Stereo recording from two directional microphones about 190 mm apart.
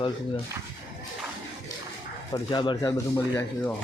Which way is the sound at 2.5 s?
25° left (ahead or behind).